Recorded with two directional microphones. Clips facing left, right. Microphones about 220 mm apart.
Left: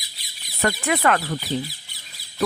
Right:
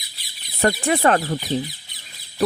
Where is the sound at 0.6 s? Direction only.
30° right (ahead or behind).